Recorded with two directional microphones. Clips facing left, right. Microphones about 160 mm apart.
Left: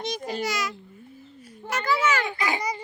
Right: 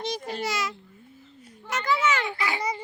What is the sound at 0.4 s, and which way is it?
A woman's voice, 25° right (ahead or behind).